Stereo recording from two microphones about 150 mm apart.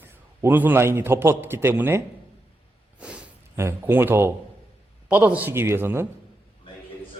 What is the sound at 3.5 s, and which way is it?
A man's voice, 15° right (ahead or behind).